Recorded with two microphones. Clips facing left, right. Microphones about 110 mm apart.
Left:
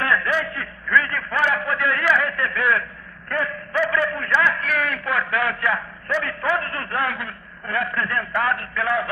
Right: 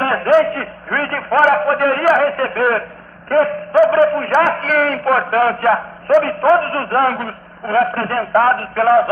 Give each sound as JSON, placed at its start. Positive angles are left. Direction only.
{"t": 0.0, "sound": "a man's voice", "side_deg": -45}